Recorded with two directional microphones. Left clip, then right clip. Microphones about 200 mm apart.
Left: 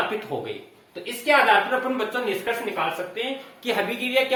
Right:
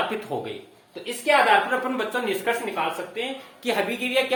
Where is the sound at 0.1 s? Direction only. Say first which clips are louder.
Left 1 dB; 30° right (ahead or behind).